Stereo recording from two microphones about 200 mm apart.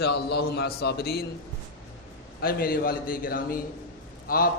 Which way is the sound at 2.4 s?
50° left (ahead or behind).